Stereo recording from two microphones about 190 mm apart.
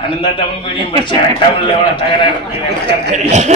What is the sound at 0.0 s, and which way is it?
A man's voice, 25° left (ahead or behind).